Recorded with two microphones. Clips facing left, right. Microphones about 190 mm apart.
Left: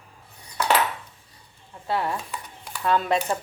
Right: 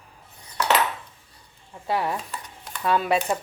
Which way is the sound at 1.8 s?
15° right (ahead or behind).